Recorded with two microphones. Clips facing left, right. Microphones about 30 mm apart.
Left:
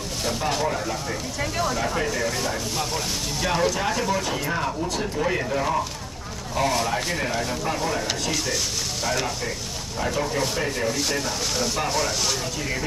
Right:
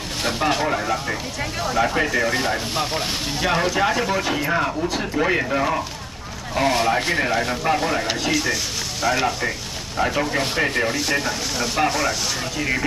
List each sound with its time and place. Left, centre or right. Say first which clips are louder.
0.2 s speech: right 4 dB; right
1.4 s speech: left 3 dB; centre
1.8 s speech: right 5 dB; right
8.1 s speech: right 4 dB; right